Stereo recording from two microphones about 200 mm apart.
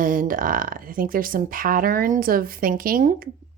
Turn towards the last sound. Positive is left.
turn(degrees=-45)  # may be behind; listen again after turning